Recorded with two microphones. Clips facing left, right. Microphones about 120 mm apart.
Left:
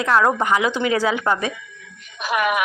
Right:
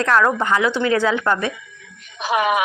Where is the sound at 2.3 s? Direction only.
35° right (ahead or behind).